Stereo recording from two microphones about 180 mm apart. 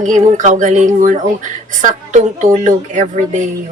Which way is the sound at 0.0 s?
45° right (ahead or behind).